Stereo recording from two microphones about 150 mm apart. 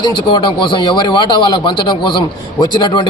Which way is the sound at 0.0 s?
30° left (ahead or behind).